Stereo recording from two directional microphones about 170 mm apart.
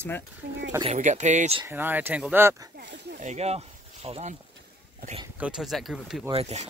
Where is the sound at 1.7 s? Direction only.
10° right (ahead or behind).